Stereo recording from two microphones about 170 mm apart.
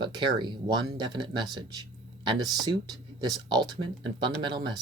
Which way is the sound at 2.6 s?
25° right (ahead or behind).